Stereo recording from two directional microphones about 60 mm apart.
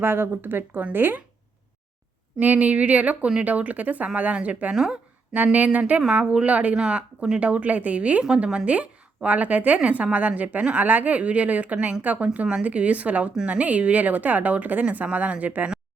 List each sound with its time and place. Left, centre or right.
0.0 s speech: right
2.4 s speech: right
4.7 s a woman's voice: centre
5.3 s speech: right